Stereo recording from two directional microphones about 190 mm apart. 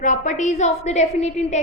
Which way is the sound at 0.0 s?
40° left (ahead or behind).